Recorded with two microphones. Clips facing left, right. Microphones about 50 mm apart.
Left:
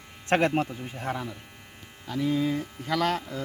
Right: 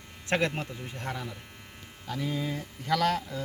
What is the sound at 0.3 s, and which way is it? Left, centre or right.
Speech, left.